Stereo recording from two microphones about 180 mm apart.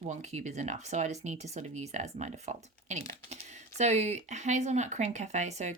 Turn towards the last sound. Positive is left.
turn(degrees=-40)  # may be behind; listen again after turning